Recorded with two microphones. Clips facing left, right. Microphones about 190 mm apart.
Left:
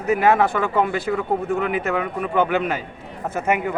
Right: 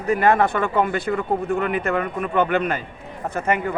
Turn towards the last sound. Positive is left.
turn(degrees=10)  # may be behind; listen again after turning